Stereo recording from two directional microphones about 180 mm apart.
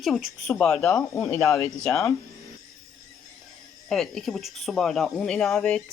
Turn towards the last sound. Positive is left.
turn(degrees=5)  # may be behind; listen again after turning